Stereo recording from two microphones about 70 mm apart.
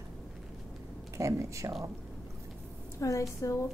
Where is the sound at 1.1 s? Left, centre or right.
Right.